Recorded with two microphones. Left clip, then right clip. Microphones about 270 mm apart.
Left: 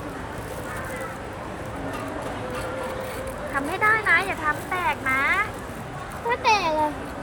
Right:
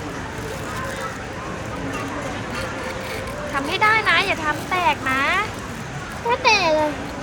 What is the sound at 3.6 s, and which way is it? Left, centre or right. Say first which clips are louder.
Speech: right 4 dB; centre.